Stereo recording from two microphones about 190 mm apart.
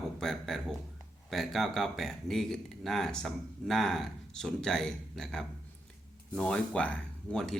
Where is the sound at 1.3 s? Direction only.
Centre (ahead or behind).